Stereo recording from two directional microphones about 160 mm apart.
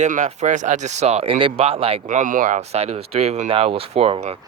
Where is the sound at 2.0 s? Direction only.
55° right (ahead or behind).